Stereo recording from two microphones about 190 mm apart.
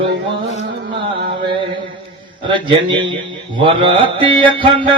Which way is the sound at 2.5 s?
25° right (ahead or behind).